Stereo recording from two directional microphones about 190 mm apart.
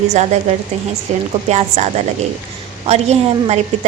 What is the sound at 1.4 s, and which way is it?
A woman's voice, 35° right (ahead or behind).